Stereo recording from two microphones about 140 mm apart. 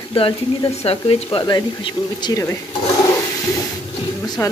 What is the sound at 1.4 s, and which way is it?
Speech, 30° left (ahead or behind).